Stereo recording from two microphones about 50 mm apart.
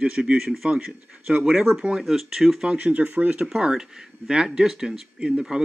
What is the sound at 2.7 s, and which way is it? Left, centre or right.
Speech, right.